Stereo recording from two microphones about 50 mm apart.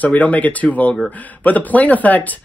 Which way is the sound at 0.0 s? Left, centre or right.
Left.